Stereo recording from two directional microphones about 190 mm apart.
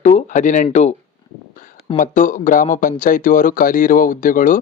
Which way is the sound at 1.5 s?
45° left (ahead or behind).